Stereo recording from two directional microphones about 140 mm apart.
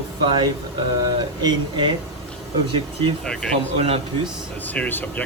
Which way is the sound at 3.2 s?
5° left (ahead or behind).